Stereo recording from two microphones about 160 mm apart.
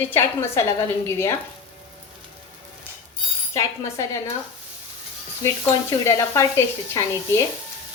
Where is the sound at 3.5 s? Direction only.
20° left (ahead or behind).